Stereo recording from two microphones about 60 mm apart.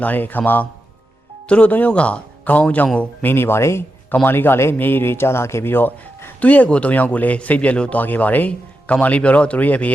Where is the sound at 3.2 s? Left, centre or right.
Left.